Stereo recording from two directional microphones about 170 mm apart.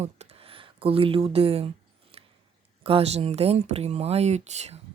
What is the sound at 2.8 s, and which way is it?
Speech, 35° right (ahead or behind).